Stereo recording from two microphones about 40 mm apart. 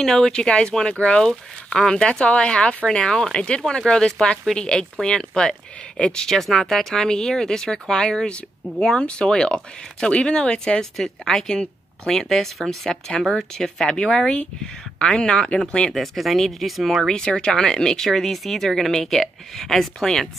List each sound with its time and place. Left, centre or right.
0.0 s speech: centre
0.3 s speech: left
6.2 s speech: centre; by 15.9 s left
15.9 s speech: centre
17.1 s speech: left